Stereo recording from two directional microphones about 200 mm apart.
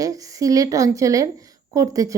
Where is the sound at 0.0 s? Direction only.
15° right (ahead or behind).